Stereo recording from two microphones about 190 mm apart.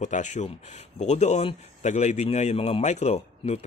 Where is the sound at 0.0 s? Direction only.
40° left (ahead or behind).